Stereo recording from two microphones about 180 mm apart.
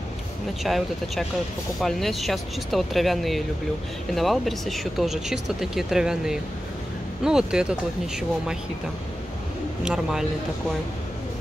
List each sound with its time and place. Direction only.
0.7 s speech: centre (ahead or behind)
9.8 s speech: centre (ahead or behind)